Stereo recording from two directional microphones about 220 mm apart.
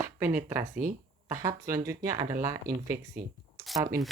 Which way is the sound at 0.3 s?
10° right (ahead or behind).